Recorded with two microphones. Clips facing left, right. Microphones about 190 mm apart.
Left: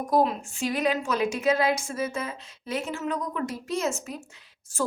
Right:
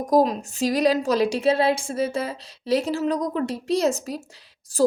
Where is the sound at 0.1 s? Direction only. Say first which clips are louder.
Right 5 dB; 40° right (ahead or behind).